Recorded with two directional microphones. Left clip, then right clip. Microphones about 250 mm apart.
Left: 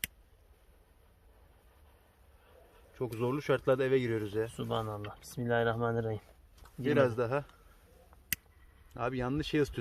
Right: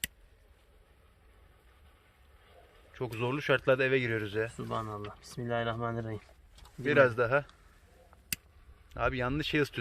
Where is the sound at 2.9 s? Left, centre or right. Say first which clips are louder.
Even; centre.